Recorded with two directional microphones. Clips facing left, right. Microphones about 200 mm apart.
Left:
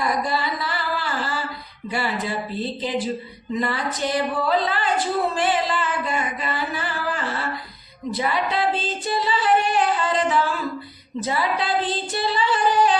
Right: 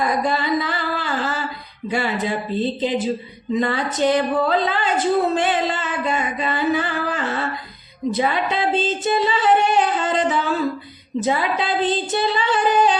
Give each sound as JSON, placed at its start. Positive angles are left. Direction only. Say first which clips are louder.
{"t": 0.0, "sound": "a sound", "louder": "right 3 dB", "side_deg": -20}
{"t": 1.9, "sound": "female singing", "louder": "right 4 dB", "side_deg": -20}
{"t": 4.7, "sound": "speech", "louder": "right 4 dB", "side_deg": -20}
{"t": 8.1, "sound": "female singing", "louder": "right 2 dB", "side_deg": -20}